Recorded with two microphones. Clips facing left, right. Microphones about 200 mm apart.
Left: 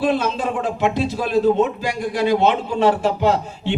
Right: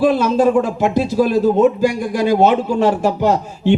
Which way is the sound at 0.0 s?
45° right (ahead or behind).